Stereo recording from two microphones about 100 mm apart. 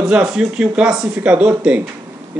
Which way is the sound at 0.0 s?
5° right (ahead or behind).